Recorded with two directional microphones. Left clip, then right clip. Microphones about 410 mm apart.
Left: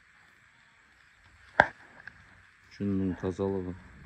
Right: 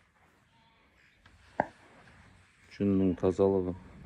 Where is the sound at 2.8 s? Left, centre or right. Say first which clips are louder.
Right 4 dB; right.